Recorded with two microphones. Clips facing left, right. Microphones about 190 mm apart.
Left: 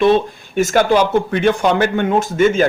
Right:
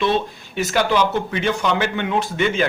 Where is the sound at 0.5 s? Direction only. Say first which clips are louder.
Left 6 dB; 50° left (ahead or behind).